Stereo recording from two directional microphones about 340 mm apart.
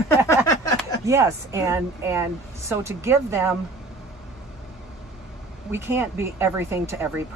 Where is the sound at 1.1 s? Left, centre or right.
Centre.